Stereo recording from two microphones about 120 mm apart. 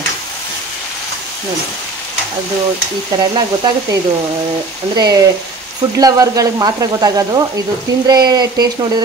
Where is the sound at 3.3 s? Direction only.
35° right (ahead or behind).